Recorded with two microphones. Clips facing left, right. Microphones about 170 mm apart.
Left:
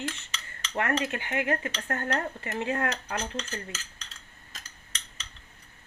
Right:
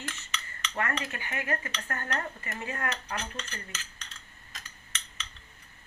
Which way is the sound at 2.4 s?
70° left (ahead or behind).